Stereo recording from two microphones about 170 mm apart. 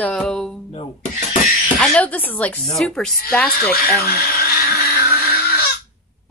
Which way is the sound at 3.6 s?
60° left (ahead or behind).